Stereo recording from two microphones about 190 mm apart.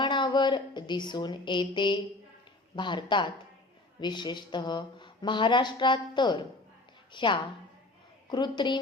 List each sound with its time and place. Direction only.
0.0 s a woman's voice: 25° left (ahead or behind)